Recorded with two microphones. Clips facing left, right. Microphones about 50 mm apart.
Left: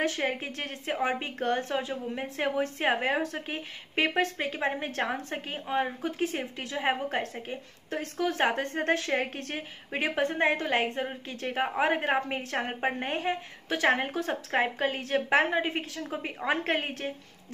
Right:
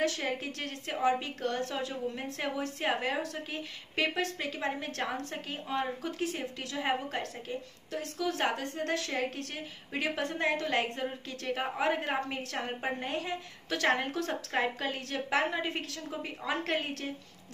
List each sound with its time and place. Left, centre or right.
0.0 s a woman's voice: left